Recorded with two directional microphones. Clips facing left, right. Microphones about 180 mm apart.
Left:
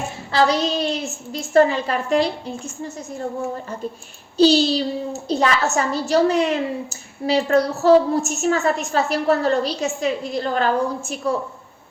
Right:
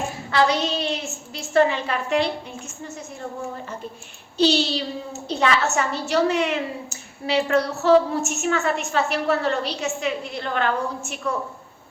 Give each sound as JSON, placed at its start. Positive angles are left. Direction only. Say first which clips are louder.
{"t": 0.3, "sound": "a woman's voice", "louder": "left 2 dB", "side_deg": 35}
{"t": 4.4, "sound": "a woman's voice", "louder": "left 5 dB", "side_deg": 40}